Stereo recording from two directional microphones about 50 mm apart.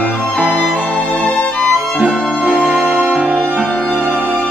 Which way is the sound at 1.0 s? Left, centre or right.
Left.